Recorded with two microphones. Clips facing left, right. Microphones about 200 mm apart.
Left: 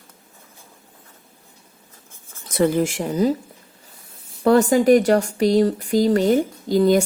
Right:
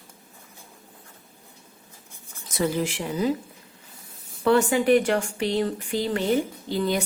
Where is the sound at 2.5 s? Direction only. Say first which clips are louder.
Left 7 dB; 55° left (ahead or behind).